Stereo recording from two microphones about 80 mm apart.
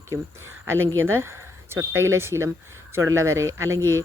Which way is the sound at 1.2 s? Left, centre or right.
Right.